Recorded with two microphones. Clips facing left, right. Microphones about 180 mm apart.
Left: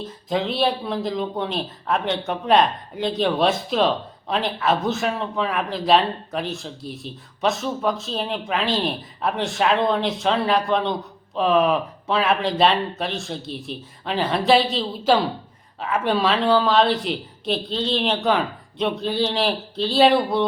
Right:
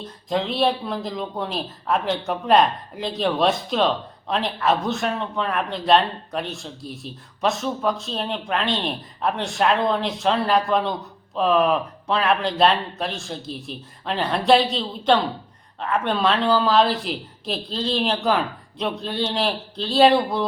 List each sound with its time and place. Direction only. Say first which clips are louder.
0.0 s speech: left 1 dB; centre (ahead or behind)